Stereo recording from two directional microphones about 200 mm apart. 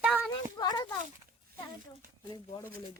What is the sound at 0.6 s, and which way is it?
Speech, 20° left (ahead or behind).